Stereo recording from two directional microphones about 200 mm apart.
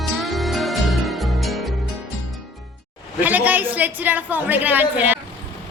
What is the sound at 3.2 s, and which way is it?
A woman's voice, 10° right (ahead or behind).